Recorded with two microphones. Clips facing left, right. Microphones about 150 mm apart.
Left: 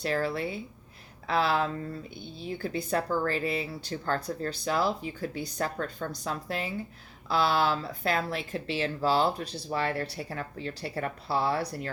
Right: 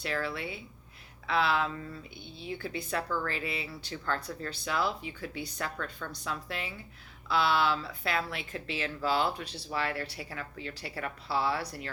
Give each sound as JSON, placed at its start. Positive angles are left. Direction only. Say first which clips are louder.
{"t": 0.0, "sound": "speech", "louder": "left 5 dB", "side_deg": 40}